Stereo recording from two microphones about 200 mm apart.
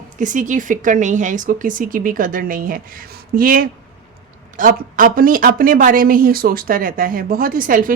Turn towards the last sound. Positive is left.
turn(degrees=-45)  # may be behind; listen again after turning